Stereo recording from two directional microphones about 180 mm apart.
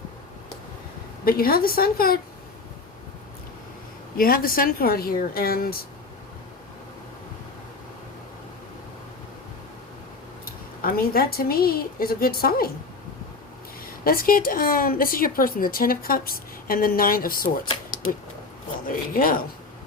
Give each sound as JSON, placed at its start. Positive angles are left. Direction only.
{"t": 1.2, "sound": "a woman's voice", "side_deg": 55}
{"t": 4.2, "sound": "a woman's voice", "side_deg": 55}
{"t": 10.4, "sound": "a woman's voice", "side_deg": 55}
{"t": 13.8, "sound": "a woman's voice", "side_deg": 55}
{"t": 18.9, "sound": "a woman's voice", "side_deg": 50}